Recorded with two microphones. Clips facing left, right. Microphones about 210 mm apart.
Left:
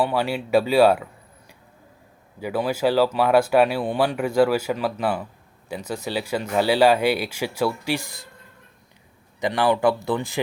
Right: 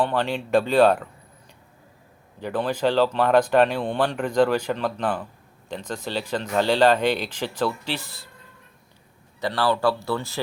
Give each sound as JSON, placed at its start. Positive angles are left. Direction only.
{"t": 0.0, "sound": "speech", "side_deg": 10}
{"t": 2.4, "sound": "speech", "side_deg": 10}
{"t": 9.4, "sound": "speech", "side_deg": 15}